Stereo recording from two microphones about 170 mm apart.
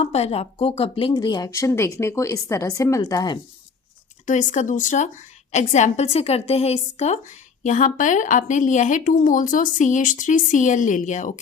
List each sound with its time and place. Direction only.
0.0 s speech: 35° left (ahead or behind)
4.3 s a woman's voice: 45° left (ahead or behind)